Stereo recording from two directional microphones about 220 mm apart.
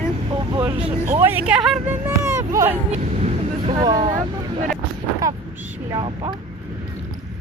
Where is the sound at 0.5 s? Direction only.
20° right (ahead or behind).